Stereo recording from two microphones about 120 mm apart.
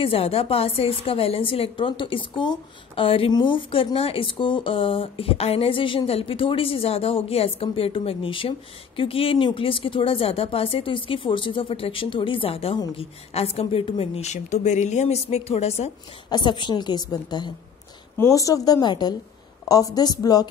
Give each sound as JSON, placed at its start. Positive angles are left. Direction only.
{"t": 0.0, "sound": "a woman's voice", "side_deg": 55}
{"t": 16.3, "sound": "a woman's voice", "side_deg": 40}
{"t": 18.1, "sound": "a woman's voice", "side_deg": 25}